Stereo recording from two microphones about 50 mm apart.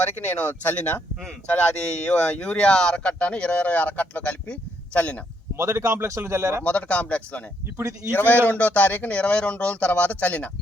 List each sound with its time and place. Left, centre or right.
0.2 s speech: left
1.5 s speech: left
5.5 s a man's voice: right
6.7 s speech: left
7.8 s speech: right
8.1 s speech: left